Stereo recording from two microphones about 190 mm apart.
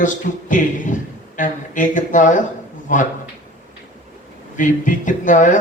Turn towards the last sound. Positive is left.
turn(degrees=40)  # may be behind; listen again after turning